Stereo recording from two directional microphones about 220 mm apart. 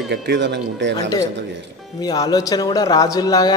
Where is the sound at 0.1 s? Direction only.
50° right (ahead or behind).